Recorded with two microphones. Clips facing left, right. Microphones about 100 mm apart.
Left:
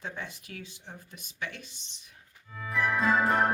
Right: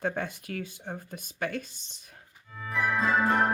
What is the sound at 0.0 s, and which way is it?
Speech, 50° right (ahead or behind).